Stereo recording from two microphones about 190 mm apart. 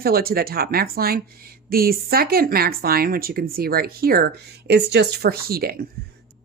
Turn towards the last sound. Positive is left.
turn(degrees=-50)  # may be behind; listen again after turning